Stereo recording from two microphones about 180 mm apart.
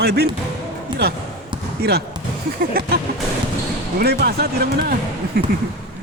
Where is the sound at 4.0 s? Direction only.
60° right (ahead or behind).